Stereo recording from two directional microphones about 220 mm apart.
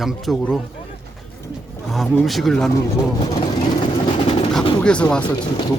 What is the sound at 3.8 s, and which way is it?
Vehicle, 25° left (ahead or behind).